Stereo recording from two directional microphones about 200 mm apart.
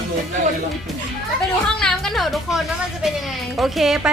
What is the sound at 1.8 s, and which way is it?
Speech, centre (ahead or behind).